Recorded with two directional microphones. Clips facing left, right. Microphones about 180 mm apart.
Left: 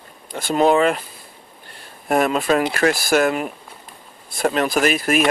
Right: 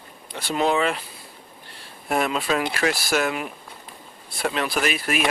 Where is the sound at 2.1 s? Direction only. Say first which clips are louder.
Left 5 dB; 50° left (ahead or behind).